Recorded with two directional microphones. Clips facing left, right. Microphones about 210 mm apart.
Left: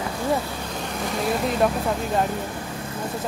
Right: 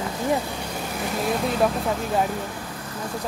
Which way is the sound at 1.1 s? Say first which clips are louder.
Left 1 dB; centre (ahead or behind).